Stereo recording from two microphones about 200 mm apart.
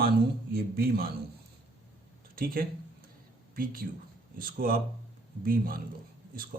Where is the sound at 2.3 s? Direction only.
45° right (ahead or behind).